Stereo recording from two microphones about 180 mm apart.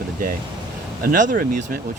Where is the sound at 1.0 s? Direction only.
50° right (ahead or behind).